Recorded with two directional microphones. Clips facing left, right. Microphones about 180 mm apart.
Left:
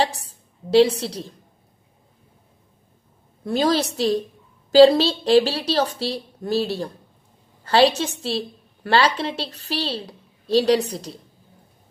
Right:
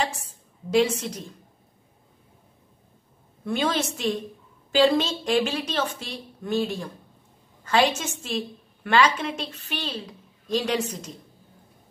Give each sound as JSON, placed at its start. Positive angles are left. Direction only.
{"t": 0.0, "sound": "a woman's voice", "side_deg": 35}
{"t": 3.4, "sound": "a woman's voice", "side_deg": 35}